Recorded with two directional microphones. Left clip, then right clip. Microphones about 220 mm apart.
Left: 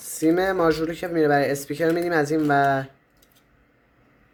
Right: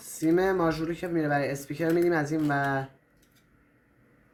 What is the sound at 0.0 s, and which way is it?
Speech, 50° left (ahead or behind).